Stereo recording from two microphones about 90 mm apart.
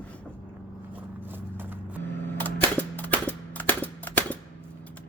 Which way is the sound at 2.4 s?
20° left (ahead or behind).